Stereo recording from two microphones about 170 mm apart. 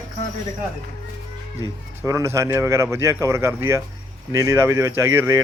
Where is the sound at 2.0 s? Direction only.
15° right (ahead or behind).